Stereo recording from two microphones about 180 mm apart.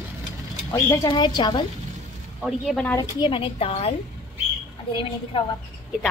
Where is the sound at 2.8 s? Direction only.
20° left (ahead or behind).